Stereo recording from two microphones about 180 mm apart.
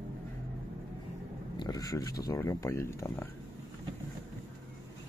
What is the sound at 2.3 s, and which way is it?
Speech, 15° left (ahead or behind).